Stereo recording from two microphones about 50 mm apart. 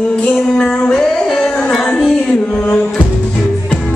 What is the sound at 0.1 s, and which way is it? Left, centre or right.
Music, left.